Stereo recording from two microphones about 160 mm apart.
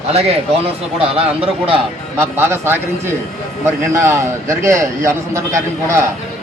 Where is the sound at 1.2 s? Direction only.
35° right (ahead or behind).